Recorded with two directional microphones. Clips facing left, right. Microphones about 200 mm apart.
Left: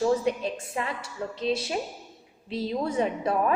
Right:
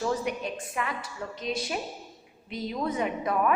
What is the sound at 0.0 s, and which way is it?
A woman's voice, 30° left (ahead or behind).